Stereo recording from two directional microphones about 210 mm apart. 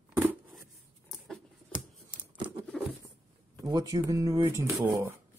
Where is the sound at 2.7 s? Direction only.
Centre (ahead or behind).